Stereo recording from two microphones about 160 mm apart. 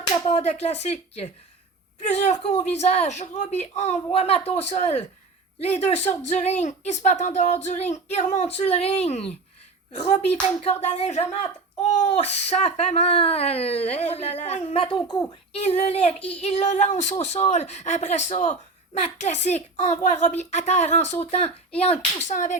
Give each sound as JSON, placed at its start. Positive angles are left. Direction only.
{"t": 0.3, "sound": "a woman's voice", "side_deg": 45}
{"t": 15.5, "sound": "a woman's voice", "side_deg": 40}